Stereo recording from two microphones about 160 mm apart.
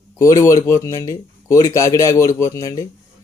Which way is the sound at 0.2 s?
20° left (ahead or behind).